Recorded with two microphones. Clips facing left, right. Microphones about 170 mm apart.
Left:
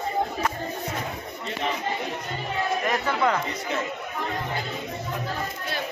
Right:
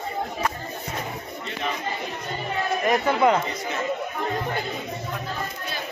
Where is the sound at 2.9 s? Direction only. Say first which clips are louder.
Right 7 dB; 20° right (ahead or behind).